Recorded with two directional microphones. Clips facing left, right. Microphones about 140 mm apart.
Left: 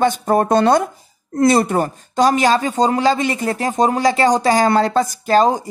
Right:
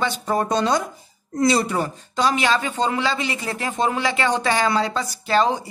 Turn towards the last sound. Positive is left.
turn(degrees=45)  # may be behind; listen again after turning